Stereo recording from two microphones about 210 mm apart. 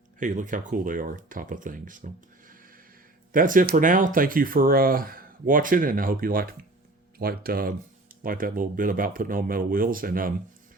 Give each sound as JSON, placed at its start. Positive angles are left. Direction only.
{"t": 0.2, "sound": "speech", "side_deg": -35}